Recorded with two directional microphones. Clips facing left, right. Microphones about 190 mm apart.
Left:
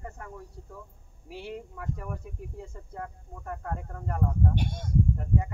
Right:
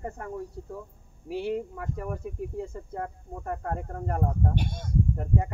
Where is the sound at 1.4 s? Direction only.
45° right (ahead or behind).